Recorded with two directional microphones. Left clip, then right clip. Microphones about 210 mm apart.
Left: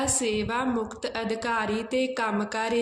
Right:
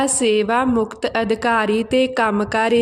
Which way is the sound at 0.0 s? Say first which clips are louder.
Right 10 dB; 45° right (ahead or behind).